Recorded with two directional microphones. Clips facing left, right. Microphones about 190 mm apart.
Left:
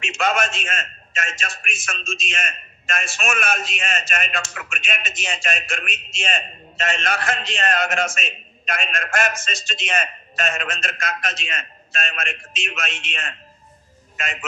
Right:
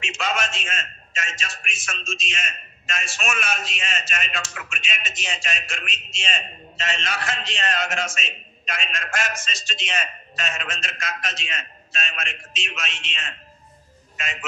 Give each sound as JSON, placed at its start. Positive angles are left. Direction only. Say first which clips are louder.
{"t": 0.0, "sound": "a man's voice", "louder": "left 5 dB", "side_deg": 55}